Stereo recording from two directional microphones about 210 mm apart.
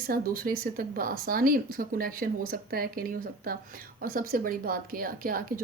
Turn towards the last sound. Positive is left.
turn(degrees=-45)  # may be behind; listen again after turning